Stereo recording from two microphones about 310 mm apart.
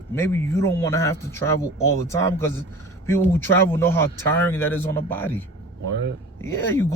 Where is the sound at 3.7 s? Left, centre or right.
Centre.